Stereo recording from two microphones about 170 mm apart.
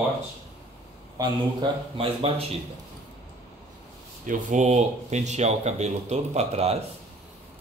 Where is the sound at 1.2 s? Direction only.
30° right (ahead or behind).